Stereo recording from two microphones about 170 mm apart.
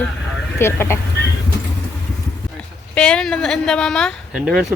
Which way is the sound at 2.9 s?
5° left (ahead or behind).